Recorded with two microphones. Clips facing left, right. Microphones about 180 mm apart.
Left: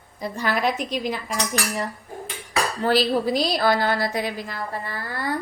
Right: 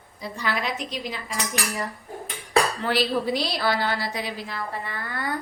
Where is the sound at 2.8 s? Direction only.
40° left (ahead or behind).